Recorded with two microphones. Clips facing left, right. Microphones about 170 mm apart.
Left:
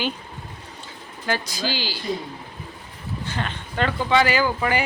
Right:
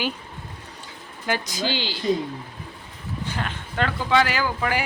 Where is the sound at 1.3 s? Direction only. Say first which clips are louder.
Even; 20° right (ahead or behind).